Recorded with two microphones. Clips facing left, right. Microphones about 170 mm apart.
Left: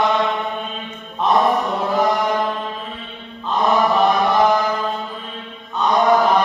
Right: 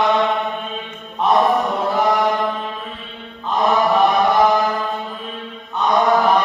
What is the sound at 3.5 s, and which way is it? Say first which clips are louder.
Mantra: even; centre (ahead or behind).